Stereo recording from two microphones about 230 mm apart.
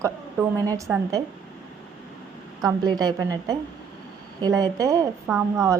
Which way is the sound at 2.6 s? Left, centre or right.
Centre.